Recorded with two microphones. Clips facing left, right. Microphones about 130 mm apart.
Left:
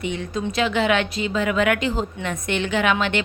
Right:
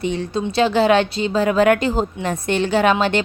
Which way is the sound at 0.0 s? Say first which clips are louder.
Right 4 dB; 35° right (ahead or behind).